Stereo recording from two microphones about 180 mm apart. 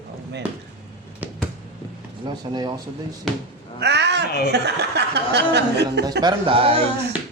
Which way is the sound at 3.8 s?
70° right (ahead or behind).